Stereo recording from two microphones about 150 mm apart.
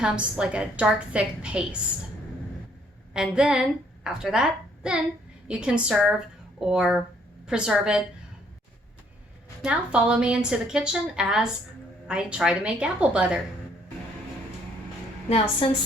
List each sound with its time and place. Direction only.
0.0 s a woman's voice: 5° right (ahead or behind)
3.1 s a woman's voice: 5° right (ahead or behind)
9.6 s a woman's voice: 5° right (ahead or behind)